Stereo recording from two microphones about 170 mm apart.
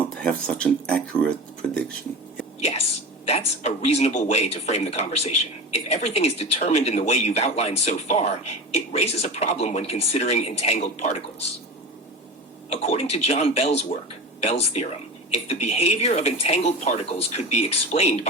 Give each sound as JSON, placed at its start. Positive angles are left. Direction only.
{"t": 0.1, "sound": "speech", "side_deg": 5}
{"t": 2.6, "sound": "speech", "side_deg": 40}
{"t": 12.7, "sound": "speech", "side_deg": 40}